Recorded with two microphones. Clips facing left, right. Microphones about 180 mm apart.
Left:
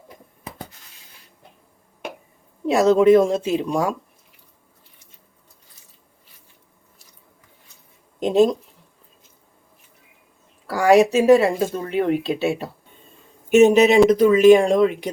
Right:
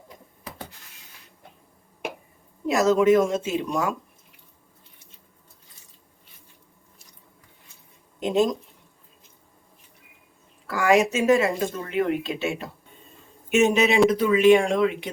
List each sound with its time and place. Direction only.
2.6 s speech: 30° left (ahead or behind)
10.7 s speech: 35° left (ahead or behind)